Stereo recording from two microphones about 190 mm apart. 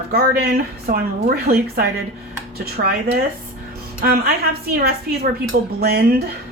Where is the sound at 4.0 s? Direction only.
50° right (ahead or behind).